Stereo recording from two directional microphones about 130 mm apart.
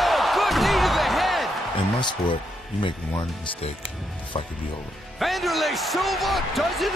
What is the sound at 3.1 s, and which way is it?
Speech, 40° left (ahead or behind).